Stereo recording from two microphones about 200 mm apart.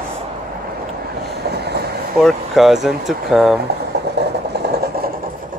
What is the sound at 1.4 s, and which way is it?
Train, 55° right (ahead or behind).